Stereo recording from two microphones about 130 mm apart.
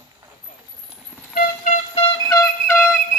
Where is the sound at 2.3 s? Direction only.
20° left (ahead or behind).